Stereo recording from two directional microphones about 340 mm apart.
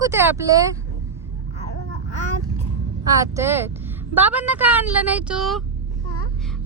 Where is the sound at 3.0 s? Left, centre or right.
Centre.